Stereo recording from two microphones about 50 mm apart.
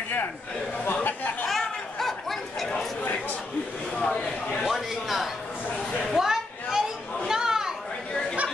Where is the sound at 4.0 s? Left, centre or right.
Left.